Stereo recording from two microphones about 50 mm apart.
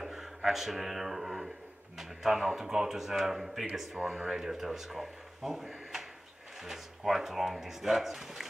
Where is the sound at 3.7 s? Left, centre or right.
Right.